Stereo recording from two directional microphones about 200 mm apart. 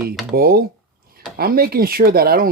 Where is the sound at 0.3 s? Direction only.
50° right (ahead or behind).